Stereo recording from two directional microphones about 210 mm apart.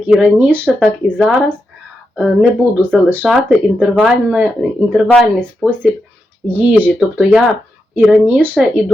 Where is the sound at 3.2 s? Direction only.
Centre (ahead or behind).